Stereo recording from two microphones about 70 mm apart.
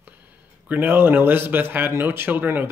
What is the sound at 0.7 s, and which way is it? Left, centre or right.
Speech, right.